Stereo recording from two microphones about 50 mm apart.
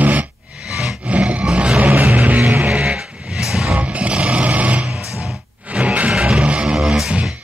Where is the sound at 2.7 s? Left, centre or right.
Right.